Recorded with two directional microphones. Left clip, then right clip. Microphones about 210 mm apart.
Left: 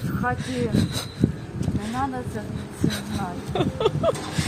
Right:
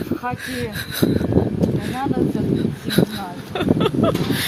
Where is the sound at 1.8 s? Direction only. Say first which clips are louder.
Right 2 dB; 10° left (ahead or behind).